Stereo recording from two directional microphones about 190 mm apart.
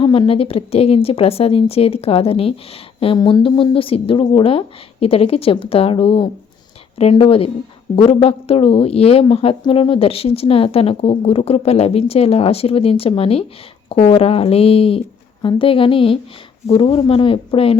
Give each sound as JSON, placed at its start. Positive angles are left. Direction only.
{"t": 0.0, "sound": "a woman's voice", "side_deg": 25}